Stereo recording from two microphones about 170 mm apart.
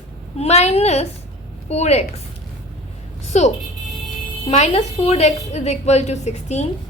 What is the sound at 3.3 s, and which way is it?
A woman's voice, 40° left (ahead or behind).